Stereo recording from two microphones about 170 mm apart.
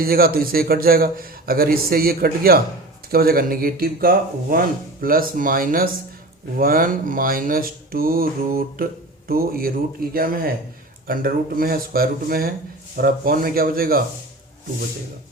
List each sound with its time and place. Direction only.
0.0 s a man's voice: 60° right (ahead or behind)